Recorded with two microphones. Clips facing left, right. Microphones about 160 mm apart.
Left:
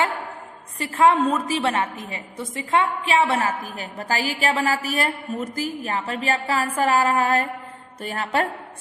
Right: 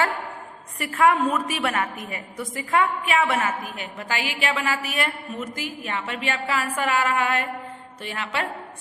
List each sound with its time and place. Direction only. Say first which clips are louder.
0.8 s a woman's voice: left 2 dB; 25° left (ahead or behind); by 8.4 s 45° left (ahead or behind)